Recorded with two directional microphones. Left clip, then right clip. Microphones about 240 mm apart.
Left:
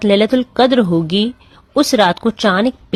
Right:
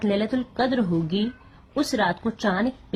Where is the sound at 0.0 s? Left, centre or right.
Left.